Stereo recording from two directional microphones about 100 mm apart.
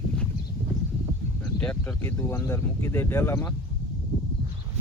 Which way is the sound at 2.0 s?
25° left (ahead or behind).